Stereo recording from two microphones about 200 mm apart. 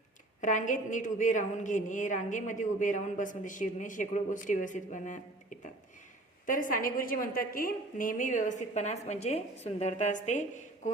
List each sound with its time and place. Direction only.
0.4 s a woman's voice: 40° left (ahead or behind)